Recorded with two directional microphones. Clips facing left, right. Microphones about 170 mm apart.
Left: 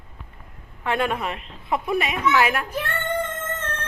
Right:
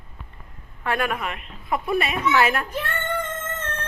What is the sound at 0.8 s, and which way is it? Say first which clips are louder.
Speech: left 1 dB; 25° left (ahead or behind).